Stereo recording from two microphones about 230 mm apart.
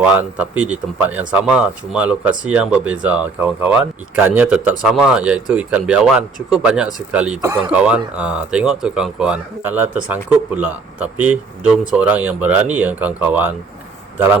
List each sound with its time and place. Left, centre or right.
0.0 s speech: centre